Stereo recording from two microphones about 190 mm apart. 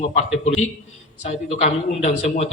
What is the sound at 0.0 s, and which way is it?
A man's voice, 40° left (ahead or behind).